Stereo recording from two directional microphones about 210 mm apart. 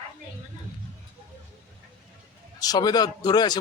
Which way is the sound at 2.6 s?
20° left (ahead or behind).